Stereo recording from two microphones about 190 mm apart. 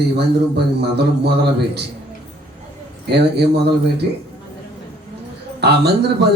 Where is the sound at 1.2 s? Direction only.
60° right (ahead or behind).